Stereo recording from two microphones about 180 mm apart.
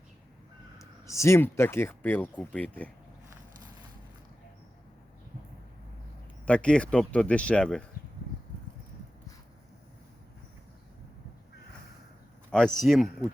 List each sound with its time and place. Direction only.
1.0 s speech: 15° left (ahead or behind)
6.4 s speech: 5° left (ahead or behind)
12.5 s speech: 5° left (ahead or behind)